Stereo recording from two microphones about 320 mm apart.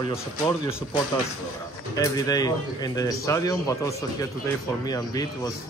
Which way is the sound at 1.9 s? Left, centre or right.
Centre.